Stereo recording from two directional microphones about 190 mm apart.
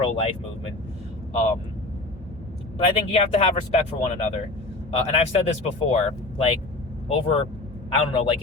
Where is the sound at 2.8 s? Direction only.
35° left (ahead or behind).